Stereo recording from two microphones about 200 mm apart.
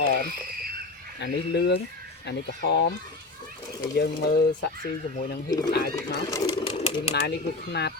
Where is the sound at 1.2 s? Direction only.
60° left (ahead or behind).